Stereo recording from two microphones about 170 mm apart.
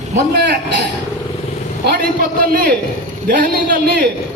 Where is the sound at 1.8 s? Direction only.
60° right (ahead or behind).